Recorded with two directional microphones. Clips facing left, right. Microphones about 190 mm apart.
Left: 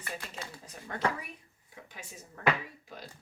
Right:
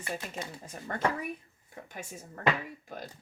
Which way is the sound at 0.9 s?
55° right (ahead or behind).